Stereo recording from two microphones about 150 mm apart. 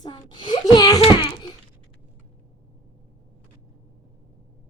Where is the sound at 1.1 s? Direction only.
25° left (ahead or behind).